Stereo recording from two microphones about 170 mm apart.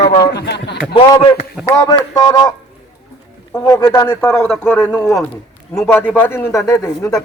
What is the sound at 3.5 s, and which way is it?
A man's voice, 15° left (ahead or behind).